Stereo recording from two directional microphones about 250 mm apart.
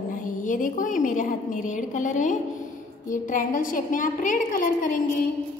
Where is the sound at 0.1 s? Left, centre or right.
Left.